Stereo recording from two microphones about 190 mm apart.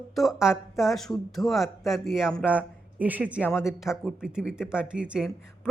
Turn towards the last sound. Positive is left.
turn(degrees=-5)  # may be behind; listen again after turning